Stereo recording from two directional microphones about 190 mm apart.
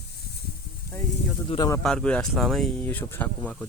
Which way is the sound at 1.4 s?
20° left (ahead or behind).